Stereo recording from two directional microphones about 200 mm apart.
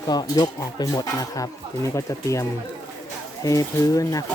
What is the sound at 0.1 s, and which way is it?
Speech, 20° left (ahead or behind).